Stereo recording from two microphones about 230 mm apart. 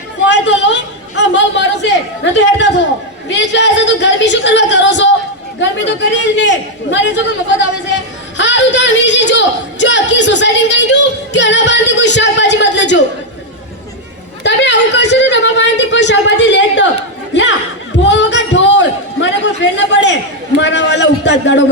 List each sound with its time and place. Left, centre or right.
0.3 s chatter: left
3.2 s a woman's voice: left
7.9 s a sound: left
14.4 s a sound: left
18.0 s music: left
19.7 s a woman's voice: left